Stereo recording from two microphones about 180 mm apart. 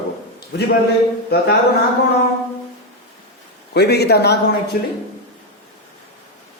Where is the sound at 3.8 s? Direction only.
65° left (ahead or behind).